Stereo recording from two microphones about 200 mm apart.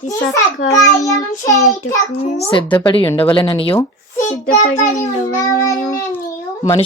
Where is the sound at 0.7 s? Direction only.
15° left (ahead or behind).